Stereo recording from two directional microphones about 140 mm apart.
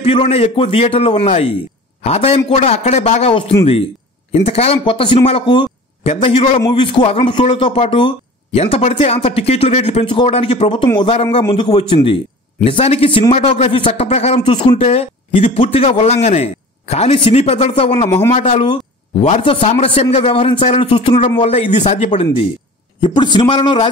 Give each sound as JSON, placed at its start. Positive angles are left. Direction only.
{"t": 0.0, "sound": "a man's voice", "side_deg": 45}
{"t": 14.0, "sound": "speech", "side_deg": 50}
{"t": 22.9, "sound": "a man's voice", "side_deg": 35}